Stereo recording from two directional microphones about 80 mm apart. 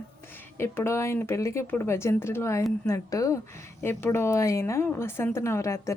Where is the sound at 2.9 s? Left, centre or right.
Left.